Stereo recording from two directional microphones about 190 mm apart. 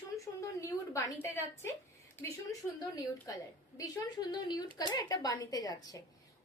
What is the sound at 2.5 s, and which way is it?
A woman's voice, 15° left (ahead or behind).